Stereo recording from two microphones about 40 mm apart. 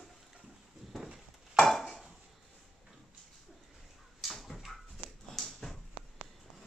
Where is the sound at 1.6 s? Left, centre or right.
Centre.